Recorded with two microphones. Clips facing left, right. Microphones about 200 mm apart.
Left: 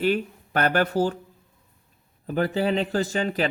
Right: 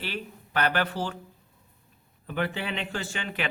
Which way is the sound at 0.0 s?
45° left (ahead or behind).